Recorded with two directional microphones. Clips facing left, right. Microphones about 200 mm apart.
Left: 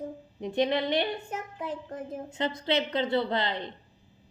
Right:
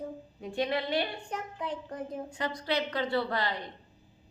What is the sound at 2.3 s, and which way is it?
A woman's voice, 25° left (ahead or behind).